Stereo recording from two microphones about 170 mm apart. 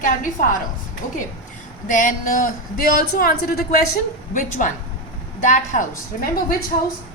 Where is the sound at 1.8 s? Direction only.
50° left (ahead or behind).